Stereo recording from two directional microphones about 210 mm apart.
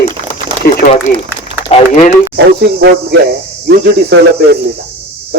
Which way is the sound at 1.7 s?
30° left (ahead or behind).